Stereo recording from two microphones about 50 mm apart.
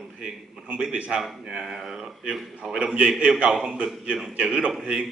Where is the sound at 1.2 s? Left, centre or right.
Centre.